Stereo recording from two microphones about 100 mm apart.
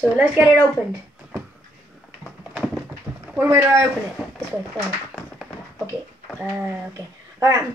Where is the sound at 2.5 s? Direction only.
10° right (ahead or behind).